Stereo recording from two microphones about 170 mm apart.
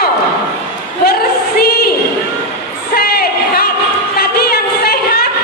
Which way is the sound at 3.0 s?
65° left (ahead or behind).